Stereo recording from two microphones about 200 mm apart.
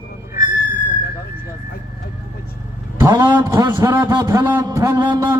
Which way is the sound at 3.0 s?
20° right (ahead or behind).